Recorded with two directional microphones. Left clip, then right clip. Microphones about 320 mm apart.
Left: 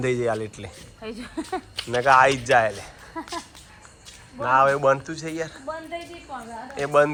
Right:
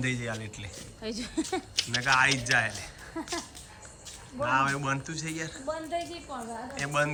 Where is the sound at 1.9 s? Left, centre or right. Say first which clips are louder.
Left 8 dB; centre.